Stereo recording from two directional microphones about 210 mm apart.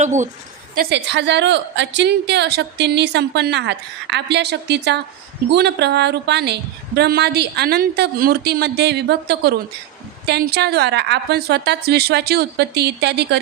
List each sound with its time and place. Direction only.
0.0 s a woman's voice: 35° right (ahead or behind)
0.8 s a woman's voice: 55° right (ahead or behind)